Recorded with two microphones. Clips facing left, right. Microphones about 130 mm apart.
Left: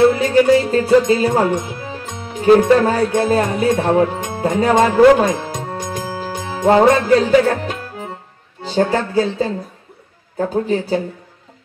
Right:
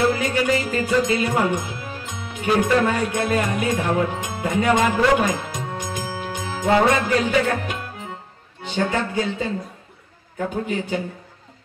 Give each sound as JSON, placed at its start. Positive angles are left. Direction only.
{"t": 0.2, "sound": "music", "side_deg": 30}
{"t": 4.4, "sound": "speech", "side_deg": 35}
{"t": 5.9, "sound": "music", "side_deg": 45}